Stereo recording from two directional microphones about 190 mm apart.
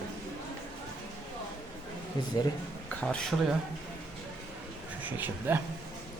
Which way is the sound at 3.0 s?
5° left (ahead or behind).